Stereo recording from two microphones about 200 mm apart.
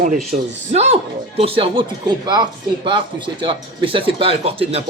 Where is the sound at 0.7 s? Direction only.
30° right (ahead or behind).